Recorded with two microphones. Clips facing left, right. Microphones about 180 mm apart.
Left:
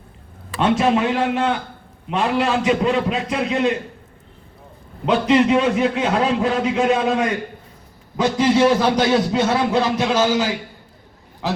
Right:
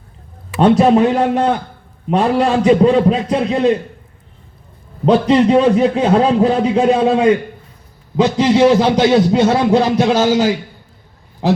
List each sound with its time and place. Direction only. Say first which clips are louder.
0.6 s a man's voice: right 7 dB; 40° right (ahead or behind)
5.0 s a man's voice: right 4 dB; 35° right (ahead or behind)